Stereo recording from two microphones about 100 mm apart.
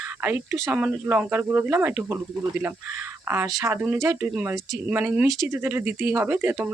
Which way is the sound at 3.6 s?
20° right (ahead or behind).